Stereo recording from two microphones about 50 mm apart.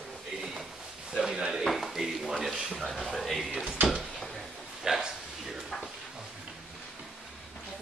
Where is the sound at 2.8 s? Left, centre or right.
Centre.